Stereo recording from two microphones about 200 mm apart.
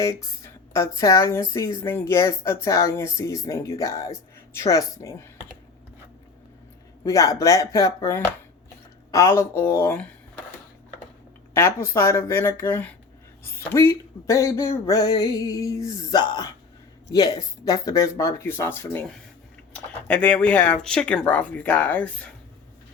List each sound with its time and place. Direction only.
0.0 s a woman's voice: 15° left (ahead or behind)
7.0 s a woman's voice: 15° left (ahead or behind)
11.5 s a woman's voice: 15° left (ahead or behind)